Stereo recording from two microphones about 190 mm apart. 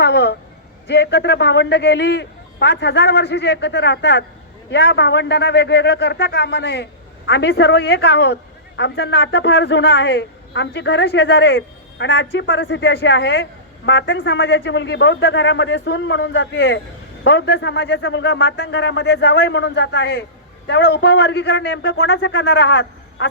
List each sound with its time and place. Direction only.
0.0 s a sound: 60° left (ahead or behind)
0.9 s a man's voice: 60° left (ahead or behind)
17.2 s a man's voice: 65° left (ahead or behind); by 23.3 s 80° left